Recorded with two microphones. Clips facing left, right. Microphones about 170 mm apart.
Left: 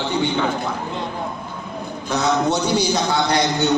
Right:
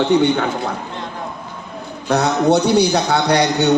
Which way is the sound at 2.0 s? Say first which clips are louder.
Right 4 dB; 65° right (ahead or behind).